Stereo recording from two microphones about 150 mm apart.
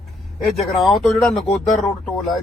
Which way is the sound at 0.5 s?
Centre (ahead or behind).